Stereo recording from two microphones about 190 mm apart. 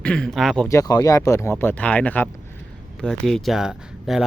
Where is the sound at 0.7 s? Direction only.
20° left (ahead or behind); by 4.3 s 5° right (ahead or behind).